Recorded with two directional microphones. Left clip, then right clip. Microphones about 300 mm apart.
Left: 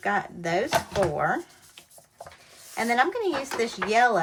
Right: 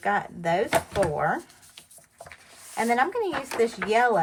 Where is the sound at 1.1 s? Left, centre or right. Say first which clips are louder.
Even; centre.